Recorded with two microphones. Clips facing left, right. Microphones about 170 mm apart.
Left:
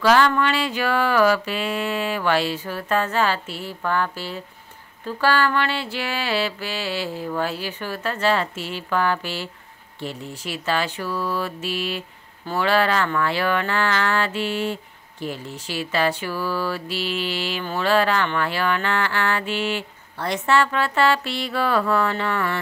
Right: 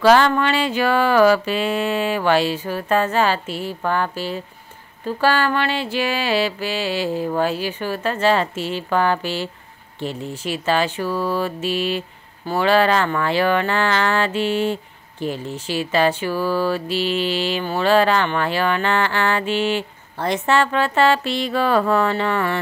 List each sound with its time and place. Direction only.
0.1 s mantra: 25° right (ahead or behind)
1.5 s speech: 25° right (ahead or behind)
7.4 s mantra: 15° right (ahead or behind)
11.0 s music: 40° right (ahead or behind)
11.6 s mantra: 20° right (ahead or behind)
16.3 s mantra: 40° right (ahead or behind)
16.7 s mantra: 20° right (ahead or behind)